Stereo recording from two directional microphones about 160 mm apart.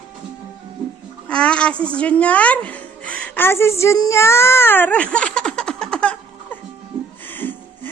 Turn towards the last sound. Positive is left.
turn(degrees=10)  # may be behind; listen again after turning